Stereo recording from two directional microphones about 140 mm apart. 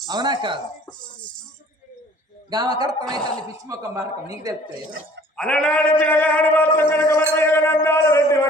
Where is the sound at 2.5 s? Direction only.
30° right (ahead or behind).